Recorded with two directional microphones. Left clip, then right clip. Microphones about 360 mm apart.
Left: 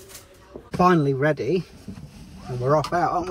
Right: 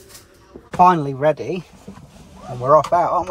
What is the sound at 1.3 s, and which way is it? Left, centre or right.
Speech, centre.